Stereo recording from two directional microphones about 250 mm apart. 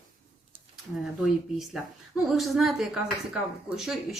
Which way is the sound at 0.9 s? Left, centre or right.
Centre.